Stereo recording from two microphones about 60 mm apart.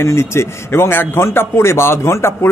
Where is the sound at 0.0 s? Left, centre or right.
Left.